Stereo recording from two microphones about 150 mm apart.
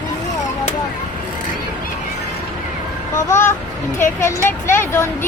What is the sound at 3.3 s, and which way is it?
Speech, 15° left (ahead or behind).